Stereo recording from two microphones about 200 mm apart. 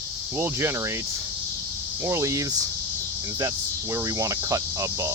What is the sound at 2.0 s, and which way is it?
Speech, 15° right (ahead or behind).